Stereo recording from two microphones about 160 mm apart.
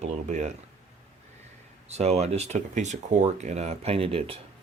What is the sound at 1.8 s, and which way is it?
Speech, 40° right (ahead or behind).